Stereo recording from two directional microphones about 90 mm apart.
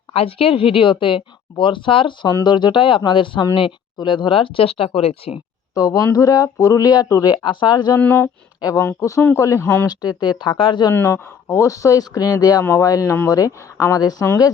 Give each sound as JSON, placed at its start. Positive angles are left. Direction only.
{"t": 0.1, "sound": "a woman's voice", "side_deg": 90}
{"t": 2.3, "sound": "a woman's voice", "side_deg": 55}
{"t": 5.7, "sound": "speech", "side_deg": 45}
{"t": 7.9, "sound": "speech", "side_deg": 25}
{"t": 9.4, "sound": "speech", "side_deg": 35}
{"t": 9.8, "sound": "speech", "side_deg": 50}
{"t": 10.9, "sound": "speech", "side_deg": 25}